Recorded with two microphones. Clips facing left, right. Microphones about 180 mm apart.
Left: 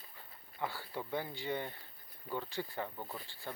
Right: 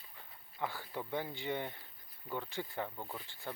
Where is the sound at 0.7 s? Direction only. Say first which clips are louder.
Even; 15° right (ahead or behind).